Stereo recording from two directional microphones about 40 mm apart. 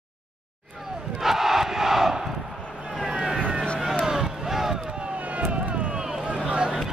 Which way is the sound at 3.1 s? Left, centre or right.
Centre.